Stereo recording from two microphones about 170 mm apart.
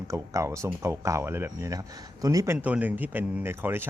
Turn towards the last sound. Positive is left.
turn(degrees=-15)  # may be behind; listen again after turning